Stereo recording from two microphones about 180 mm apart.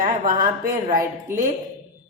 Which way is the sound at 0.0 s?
50° right (ahead or behind).